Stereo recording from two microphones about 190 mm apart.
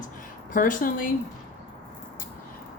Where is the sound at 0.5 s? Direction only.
45° left (ahead or behind).